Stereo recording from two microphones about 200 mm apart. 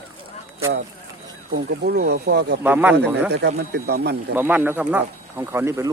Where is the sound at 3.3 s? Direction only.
55° right (ahead or behind).